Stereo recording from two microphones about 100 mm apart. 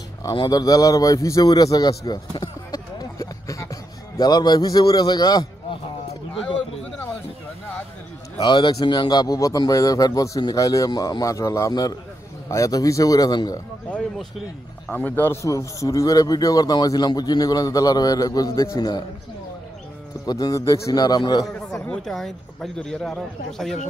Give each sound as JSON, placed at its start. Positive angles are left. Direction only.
{"t": 0.3, "sound": "a man's voice", "side_deg": 45}
{"t": 8.4, "sound": "speech", "side_deg": 50}
{"t": 14.9, "sound": "a man's voice", "side_deg": 20}
{"t": 15.4, "sound": "speech", "side_deg": 30}
{"t": 18.8, "sound": "speech", "side_deg": 45}
{"t": 20.2, "sound": "speech", "side_deg": 35}
{"t": 21.7, "sound": "speech", "side_deg": 5}